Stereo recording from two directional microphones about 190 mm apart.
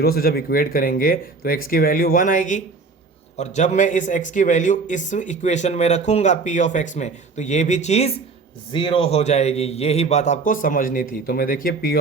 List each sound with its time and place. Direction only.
0.0 s a man's voice: 50° left (ahead or behind)